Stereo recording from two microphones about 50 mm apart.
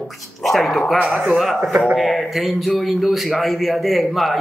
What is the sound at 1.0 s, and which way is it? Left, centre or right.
Speech, right.